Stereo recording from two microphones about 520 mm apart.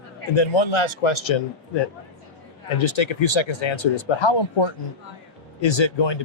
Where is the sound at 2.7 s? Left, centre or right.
Left.